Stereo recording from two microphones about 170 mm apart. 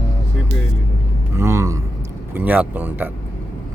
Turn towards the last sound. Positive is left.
turn(degrees=-10)  # may be behind; listen again after turning